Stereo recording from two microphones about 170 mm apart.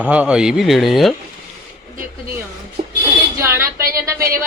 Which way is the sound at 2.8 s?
50° right (ahead or behind).